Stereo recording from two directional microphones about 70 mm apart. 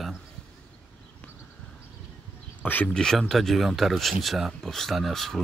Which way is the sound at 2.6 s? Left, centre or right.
Left.